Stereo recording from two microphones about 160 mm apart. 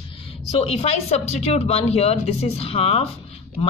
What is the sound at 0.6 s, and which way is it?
A woman's voice, 40° left (ahead or behind).